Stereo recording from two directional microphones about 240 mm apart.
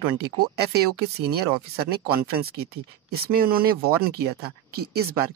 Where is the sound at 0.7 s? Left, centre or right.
Right.